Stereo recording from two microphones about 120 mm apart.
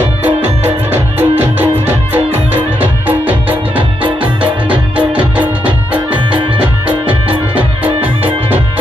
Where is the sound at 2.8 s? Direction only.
15° right (ahead or behind).